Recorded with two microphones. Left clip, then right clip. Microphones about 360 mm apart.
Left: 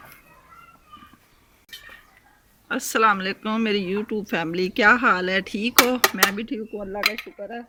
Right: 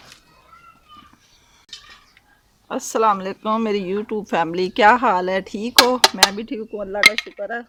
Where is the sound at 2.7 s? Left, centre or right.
Centre.